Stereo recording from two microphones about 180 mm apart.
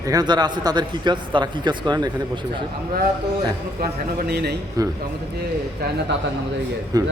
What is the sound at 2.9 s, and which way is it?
Speech, 60° right (ahead or behind).